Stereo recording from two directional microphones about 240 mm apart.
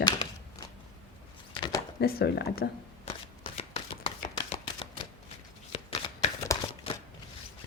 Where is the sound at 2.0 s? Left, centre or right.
Left.